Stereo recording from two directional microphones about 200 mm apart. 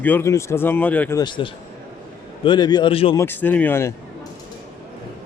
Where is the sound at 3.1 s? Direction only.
10° left (ahead or behind).